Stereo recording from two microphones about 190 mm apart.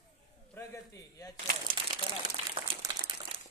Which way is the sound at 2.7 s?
25° right (ahead or behind).